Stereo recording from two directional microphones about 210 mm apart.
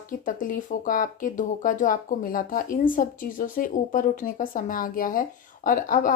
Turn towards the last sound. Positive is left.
turn(degrees=40)  # may be behind; listen again after turning